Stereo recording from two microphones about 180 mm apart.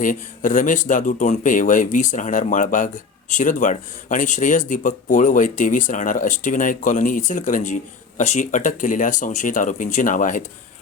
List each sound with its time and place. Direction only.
0.0 s speech: 45° left (ahead or behind)